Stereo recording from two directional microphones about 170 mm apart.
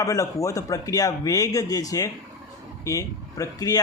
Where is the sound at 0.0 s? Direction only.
20° left (ahead or behind).